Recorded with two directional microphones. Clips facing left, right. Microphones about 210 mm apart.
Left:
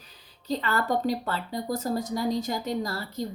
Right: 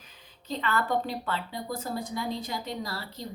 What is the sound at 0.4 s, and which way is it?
A woman's voice, 40° left (ahead or behind).